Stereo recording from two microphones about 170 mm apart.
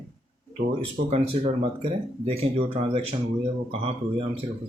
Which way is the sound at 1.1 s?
35° right (ahead or behind).